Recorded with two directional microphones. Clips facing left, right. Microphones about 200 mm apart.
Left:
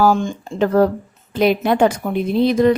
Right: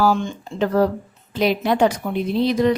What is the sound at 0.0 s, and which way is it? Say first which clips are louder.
Speech: left 3 dB; 45° left (ahead or behind).